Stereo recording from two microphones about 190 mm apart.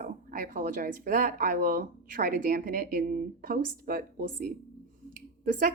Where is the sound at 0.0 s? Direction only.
45° right (ahead or behind).